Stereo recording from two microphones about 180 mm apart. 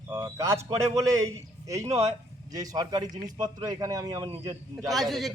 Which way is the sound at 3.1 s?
45° right (ahead or behind).